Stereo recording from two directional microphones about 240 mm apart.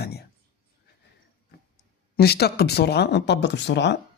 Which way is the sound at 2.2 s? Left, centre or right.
Left.